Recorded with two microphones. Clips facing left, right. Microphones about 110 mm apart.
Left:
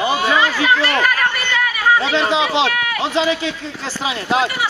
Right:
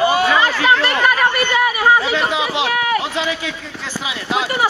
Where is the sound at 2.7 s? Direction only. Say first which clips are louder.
Right 4 dB; 30° right (ahead or behind).